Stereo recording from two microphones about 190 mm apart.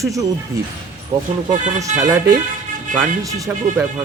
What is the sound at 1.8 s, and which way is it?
Speech, 35° right (ahead or behind).